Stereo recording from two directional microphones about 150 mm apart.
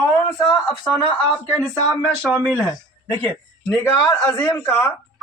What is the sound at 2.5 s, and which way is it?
Speech, 10° left (ahead or behind).